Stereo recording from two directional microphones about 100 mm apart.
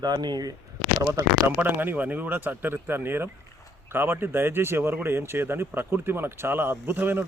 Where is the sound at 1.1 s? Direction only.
30° right (ahead or behind).